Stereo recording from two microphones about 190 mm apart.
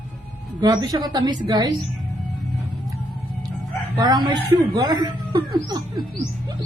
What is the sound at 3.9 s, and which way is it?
Speech, 20° right (ahead or behind).